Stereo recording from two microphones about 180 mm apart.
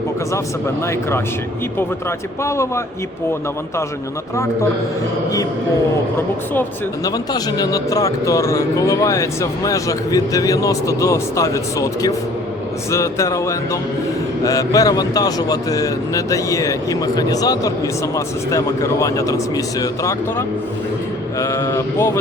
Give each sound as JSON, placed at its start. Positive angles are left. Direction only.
{"t": 0.3, "sound": "speech", "side_deg": 15}
{"t": 6.5, "sound": "a man's voice", "side_deg": 15}
{"t": 21.3, "sound": "speech", "side_deg": 15}